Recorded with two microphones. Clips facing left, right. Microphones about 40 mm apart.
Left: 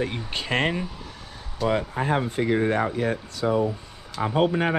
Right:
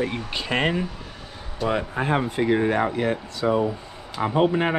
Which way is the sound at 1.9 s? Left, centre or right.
Right.